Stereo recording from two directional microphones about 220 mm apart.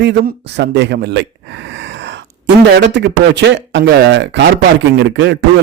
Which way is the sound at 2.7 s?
50° right (ahead or behind).